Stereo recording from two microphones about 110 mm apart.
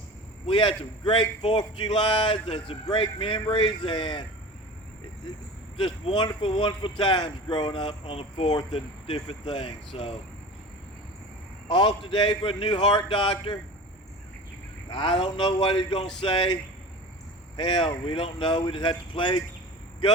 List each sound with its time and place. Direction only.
0.4 s speech: 50° left (ahead or behind)
5.7 s speech: 50° left (ahead or behind)
11.7 s speech: 50° left (ahead or behind)
14.8 s speech: 50° left (ahead or behind)
17.6 s speech: 50° left (ahead or behind)